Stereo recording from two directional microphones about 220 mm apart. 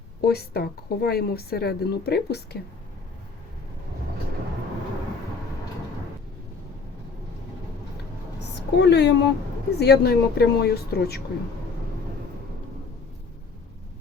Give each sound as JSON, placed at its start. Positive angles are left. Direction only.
{"t": 0.2, "sound": "speech", "side_deg": 45}
{"t": 8.4, "sound": "a woman's voice", "side_deg": 50}